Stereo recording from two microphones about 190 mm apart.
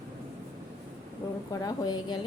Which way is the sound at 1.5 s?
20° left (ahead or behind).